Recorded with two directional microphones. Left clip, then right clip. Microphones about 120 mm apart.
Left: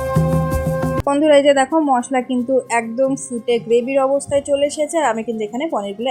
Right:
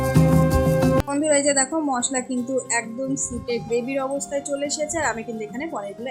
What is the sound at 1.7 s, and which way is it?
A woman's voice, 40° left (ahead or behind).